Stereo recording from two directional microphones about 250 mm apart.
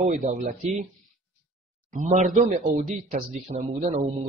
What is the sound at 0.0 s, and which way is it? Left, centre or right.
Speech, right.